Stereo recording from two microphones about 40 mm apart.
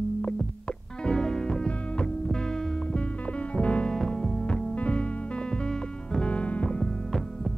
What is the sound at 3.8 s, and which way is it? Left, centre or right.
Music, centre.